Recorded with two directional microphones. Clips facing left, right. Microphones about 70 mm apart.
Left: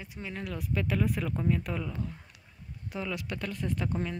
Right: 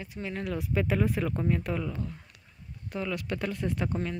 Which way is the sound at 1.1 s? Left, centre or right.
Centre.